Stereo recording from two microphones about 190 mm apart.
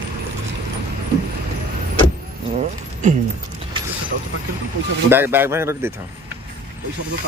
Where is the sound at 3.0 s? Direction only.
40° right (ahead or behind).